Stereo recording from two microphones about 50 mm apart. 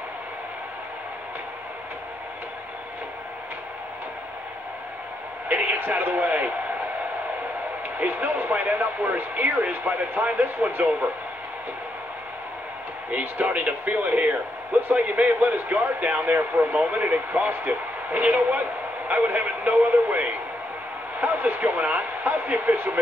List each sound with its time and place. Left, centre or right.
5.5 s a sound: right
8.0 s speech: right
13.1 s speech: right